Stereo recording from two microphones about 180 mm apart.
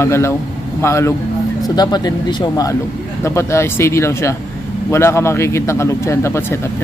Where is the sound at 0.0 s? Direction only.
15° left (ahead or behind).